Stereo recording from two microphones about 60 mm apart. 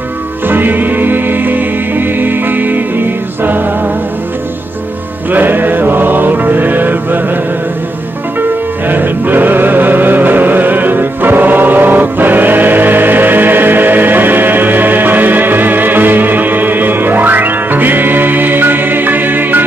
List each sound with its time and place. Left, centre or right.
0.5 s music: right
5.3 s mantra: right
8.4 s music: right